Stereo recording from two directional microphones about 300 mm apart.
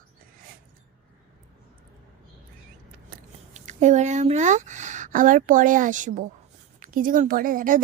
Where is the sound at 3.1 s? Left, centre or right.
Right.